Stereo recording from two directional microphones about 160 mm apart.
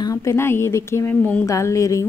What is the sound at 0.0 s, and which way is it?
A woman's voice, 20° left (ahead or behind).